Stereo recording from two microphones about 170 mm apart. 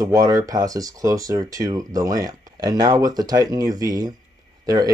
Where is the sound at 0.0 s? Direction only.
20° right (ahead or behind).